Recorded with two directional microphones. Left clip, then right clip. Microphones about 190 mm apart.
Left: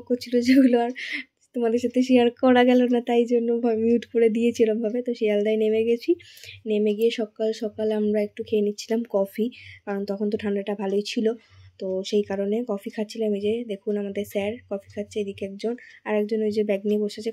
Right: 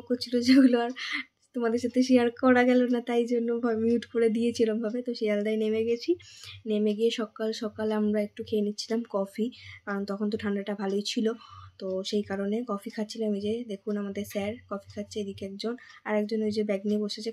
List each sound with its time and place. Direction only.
0.1 s speech: 10° left (ahead or behind)